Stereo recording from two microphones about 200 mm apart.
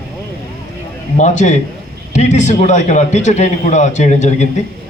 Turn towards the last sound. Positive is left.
turn(degrees=35)  # may be behind; listen again after turning